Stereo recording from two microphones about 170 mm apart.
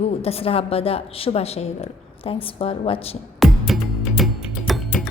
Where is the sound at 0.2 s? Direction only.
35° left (ahead or behind).